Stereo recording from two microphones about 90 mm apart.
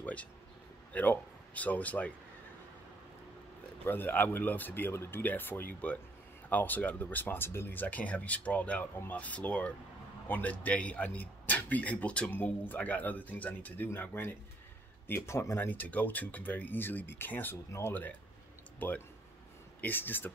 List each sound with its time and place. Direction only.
0.0 s a sound: 15° left (ahead or behind)
0.9 s a man's voice: 20° left (ahead or behind)
3.8 s a man's voice: 20° left (ahead or behind)